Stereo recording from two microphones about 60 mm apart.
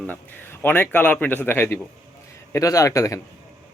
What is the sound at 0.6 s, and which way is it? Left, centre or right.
Speech, left.